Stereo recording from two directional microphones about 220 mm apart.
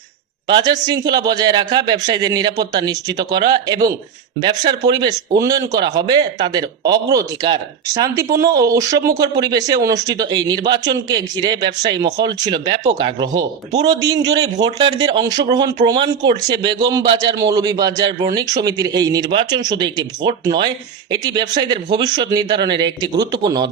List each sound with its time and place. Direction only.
0.4 s speech: 20° right (ahead or behind)